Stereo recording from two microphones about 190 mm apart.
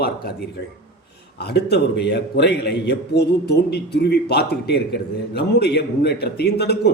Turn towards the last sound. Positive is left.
turn(degrees=60)  # may be behind; listen again after turning